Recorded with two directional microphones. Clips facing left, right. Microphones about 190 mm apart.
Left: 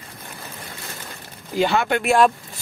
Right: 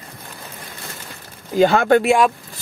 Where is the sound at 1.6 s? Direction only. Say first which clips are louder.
Right 6 dB; 45° right (ahead or behind).